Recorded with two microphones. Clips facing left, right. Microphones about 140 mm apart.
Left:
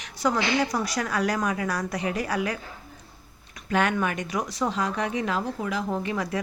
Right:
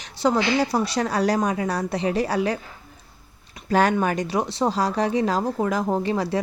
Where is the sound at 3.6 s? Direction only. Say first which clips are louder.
Right 5 dB; 35° right (ahead or behind).